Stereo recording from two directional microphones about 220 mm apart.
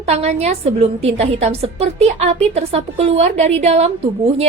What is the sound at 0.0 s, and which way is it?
A woman's voice, 30° right (ahead or behind).